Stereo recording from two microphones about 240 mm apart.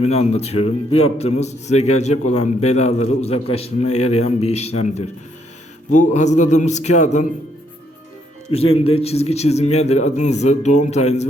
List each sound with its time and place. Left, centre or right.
0.0 s a man's voice: left
8.4 s a man's voice: left